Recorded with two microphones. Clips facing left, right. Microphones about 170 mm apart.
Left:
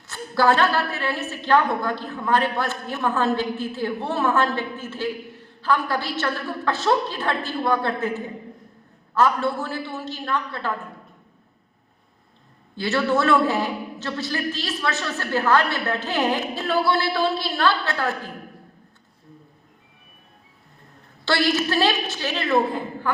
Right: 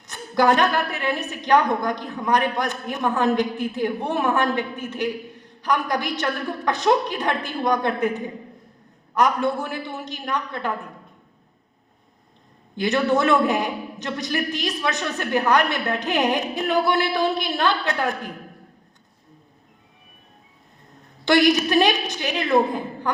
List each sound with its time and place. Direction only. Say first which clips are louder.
0.1 s a woman's voice: right 1 dB; 20° right (ahead or behind)
12.7 s a woman's voice: right 2 dB; 15° right (ahead or behind)
21.2 s a woman's voice: right 4 dB; 15° right (ahead or behind)